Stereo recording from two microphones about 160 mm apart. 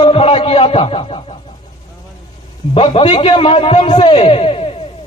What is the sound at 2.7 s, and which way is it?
A man's voice, 35° left (ahead or behind).